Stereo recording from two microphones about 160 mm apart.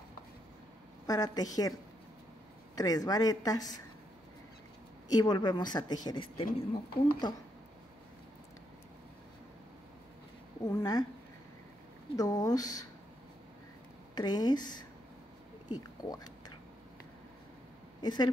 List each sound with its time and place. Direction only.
1.0 s a woman's voice: 25° left (ahead or behind)
2.7 s a woman's voice: 20° left (ahead or behind)
5.1 s a woman's voice: 25° left (ahead or behind)
10.6 s a woman's voice: 25° left (ahead or behind)
12.2 s a woman's voice: 20° left (ahead or behind)
14.1 s a woman's voice: 25° left (ahead or behind)
15.7 s a sound: 25° left (ahead or behind)
18.0 s a woman's voice: 25° left (ahead or behind)